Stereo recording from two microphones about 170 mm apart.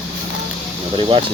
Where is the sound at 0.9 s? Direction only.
30° right (ahead or behind).